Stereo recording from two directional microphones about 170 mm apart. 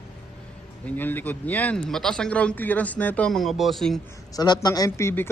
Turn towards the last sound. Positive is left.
turn(degrees=15)  # may be behind; listen again after turning